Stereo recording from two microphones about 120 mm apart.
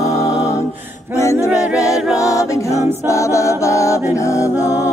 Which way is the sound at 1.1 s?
25° left (ahead or behind).